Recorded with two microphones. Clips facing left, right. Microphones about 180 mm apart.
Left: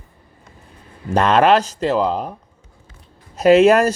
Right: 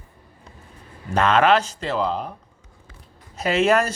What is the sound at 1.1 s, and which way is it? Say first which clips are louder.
Speech: left 4 dB; 40° left (ahead or behind).